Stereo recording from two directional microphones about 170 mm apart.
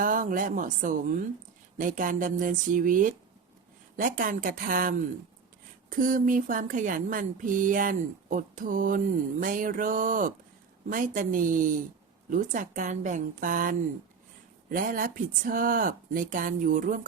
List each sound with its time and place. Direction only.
0.0 s speech: 50° right (ahead or behind)